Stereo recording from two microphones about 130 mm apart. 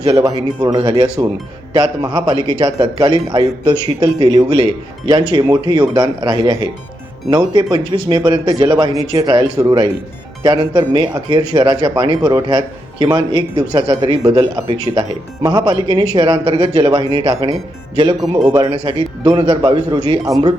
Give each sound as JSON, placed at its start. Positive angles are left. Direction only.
{"t": 0.0, "sound": "a man's voice", "side_deg": -25}
{"t": 0.8, "sound": "speech", "side_deg": -50}
{"t": 1.7, "sound": "a man's voice", "side_deg": -30}
{"t": 4.5, "sound": "speech", "side_deg": -45}
{"t": 5.3, "sound": "a man's voice", "side_deg": -35}
{"t": 16.7, "sound": "a man's voice", "side_deg": -35}
{"t": 18.3, "sound": "a man's voice", "side_deg": -35}